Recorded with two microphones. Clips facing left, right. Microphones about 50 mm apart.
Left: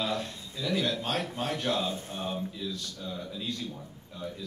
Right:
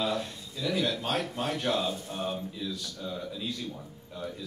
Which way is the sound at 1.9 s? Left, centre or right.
Left.